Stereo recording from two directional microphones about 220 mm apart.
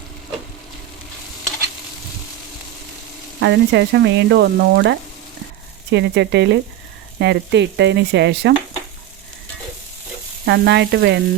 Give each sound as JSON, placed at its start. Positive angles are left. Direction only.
{"t": 3.4, "sound": "frying", "side_deg": -50}
{"t": 10.4, "sound": "frying", "side_deg": -50}